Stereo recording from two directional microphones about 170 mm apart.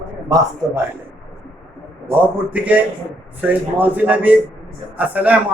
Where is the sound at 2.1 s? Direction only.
10° right (ahead or behind).